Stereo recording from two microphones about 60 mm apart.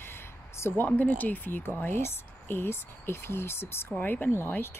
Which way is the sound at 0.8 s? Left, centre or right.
Left.